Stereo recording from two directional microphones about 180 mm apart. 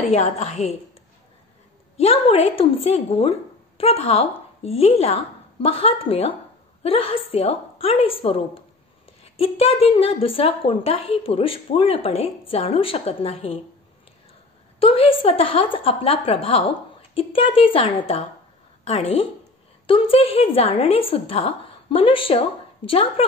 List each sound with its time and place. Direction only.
0.1 s a woman's voice: 40° left (ahead or behind)
2.0 s a woman's voice: 35° left (ahead or behind)
14.8 s a woman's voice: 30° left (ahead or behind)